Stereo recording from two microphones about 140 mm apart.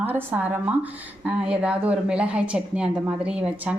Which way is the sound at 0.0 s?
15° right (ahead or behind).